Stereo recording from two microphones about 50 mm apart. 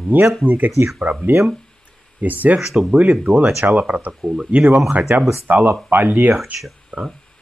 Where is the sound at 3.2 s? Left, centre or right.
Right.